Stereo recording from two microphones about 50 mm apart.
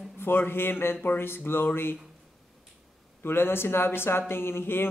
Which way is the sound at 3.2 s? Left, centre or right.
Left.